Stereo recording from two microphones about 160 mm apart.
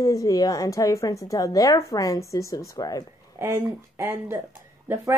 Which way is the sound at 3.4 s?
15° right (ahead or behind).